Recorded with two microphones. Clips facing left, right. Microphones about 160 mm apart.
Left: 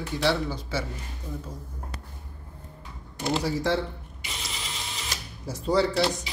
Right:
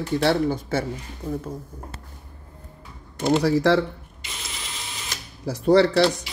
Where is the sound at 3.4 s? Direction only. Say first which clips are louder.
Right 8 dB; 80° right.